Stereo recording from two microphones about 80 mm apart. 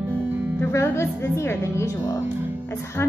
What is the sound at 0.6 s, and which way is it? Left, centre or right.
A woman's voice, left.